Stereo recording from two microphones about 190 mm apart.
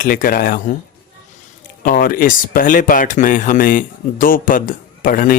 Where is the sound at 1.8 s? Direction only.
50° left (ahead or behind).